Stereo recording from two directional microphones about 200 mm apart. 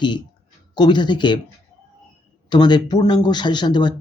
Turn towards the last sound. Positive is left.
turn(degrees=20)  # may be behind; listen again after turning